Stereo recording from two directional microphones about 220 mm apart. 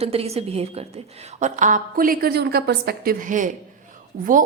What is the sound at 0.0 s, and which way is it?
A woman's voice, 25° right (ahead or behind).